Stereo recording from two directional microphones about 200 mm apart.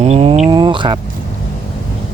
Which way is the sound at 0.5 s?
25° right (ahead or behind).